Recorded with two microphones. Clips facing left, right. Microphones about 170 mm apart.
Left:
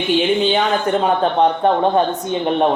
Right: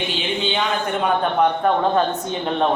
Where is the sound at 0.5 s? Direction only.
40° left (ahead or behind).